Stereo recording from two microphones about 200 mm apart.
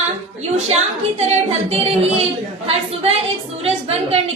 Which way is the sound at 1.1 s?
35° right (ahead or behind).